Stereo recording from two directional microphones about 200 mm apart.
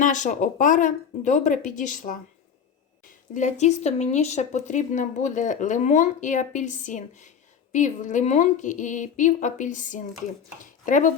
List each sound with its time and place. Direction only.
0.0 s speech: 40° left (ahead or behind)
3.3 s speech: 35° left (ahead or behind)